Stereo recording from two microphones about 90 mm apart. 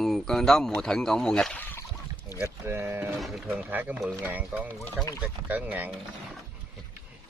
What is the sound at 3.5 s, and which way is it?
Speech, 20° right (ahead or behind).